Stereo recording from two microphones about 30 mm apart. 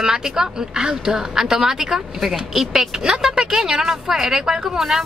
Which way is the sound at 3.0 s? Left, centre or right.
Centre.